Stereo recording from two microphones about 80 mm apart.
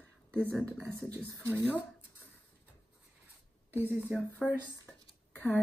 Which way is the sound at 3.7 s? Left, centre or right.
Right.